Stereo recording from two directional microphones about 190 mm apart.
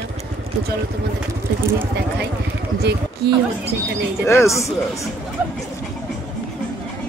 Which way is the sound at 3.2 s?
60° right (ahead or behind).